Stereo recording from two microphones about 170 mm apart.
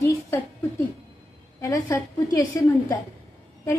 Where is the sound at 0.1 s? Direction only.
20° left (ahead or behind).